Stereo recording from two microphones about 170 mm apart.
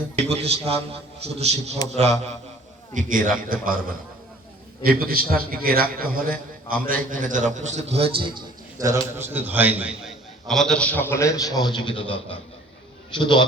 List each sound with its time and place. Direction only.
0.2 s a man's voice: 40° right (ahead or behind)
2.9 s a man's voice: 50° right (ahead or behind); by 13.4 s 25° left (ahead or behind)